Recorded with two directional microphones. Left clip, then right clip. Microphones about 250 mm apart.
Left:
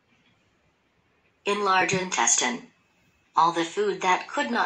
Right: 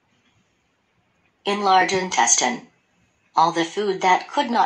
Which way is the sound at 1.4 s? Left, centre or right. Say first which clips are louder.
Right 5 dB; right.